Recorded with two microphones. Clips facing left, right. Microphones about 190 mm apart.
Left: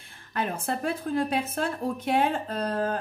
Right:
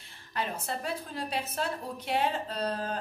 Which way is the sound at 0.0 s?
55° left (ahead or behind).